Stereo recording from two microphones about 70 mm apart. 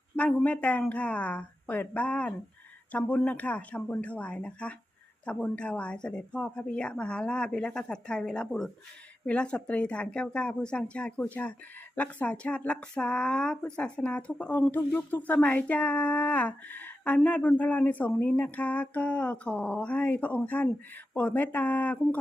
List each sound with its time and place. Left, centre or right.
0.2 s speech: centre